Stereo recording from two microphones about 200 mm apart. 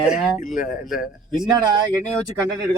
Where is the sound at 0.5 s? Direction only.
40° left (ahead or behind).